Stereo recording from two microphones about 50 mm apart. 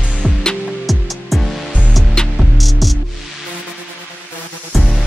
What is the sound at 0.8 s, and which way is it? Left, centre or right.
Music, centre.